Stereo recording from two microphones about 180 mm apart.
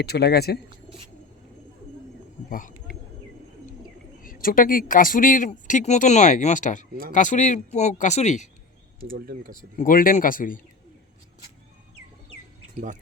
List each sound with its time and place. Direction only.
0.0 s speech: 60° left (ahead or behind)
2.5 s speech: 45° left (ahead or behind)
4.2 s speech: 50° left (ahead or behind)
9.0 s speech: 50° right (ahead or behind)
9.7 s speech: 50° left (ahead or behind)